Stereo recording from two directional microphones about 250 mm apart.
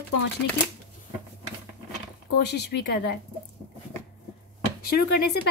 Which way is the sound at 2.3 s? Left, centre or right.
Left.